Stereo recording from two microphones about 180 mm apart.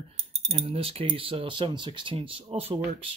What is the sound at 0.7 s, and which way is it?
Speech, 30° right (ahead or behind).